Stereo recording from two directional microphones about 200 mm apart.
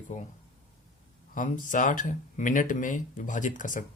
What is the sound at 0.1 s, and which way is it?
Speech, 40° left (ahead or behind).